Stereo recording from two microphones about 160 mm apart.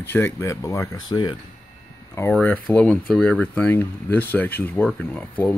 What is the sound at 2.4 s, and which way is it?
Speech, 10° left (ahead or behind).